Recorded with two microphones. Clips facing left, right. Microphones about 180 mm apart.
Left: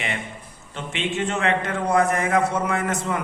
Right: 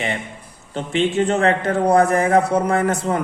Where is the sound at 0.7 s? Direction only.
35° right (ahead or behind).